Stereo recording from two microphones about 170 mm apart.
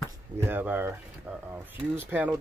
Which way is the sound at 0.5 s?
10° right (ahead or behind).